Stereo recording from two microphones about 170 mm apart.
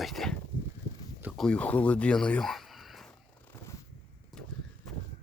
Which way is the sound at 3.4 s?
15° left (ahead or behind).